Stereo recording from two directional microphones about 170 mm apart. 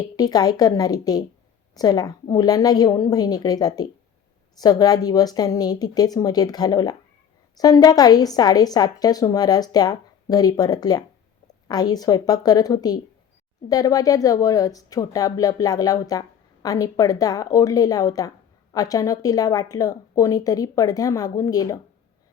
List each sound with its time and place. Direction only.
0.2 s speech: 20° left (ahead or behind)